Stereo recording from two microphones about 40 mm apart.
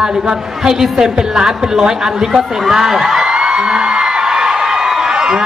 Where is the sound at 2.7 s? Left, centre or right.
Centre.